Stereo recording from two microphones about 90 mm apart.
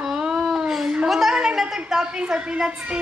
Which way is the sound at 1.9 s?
10° right (ahead or behind).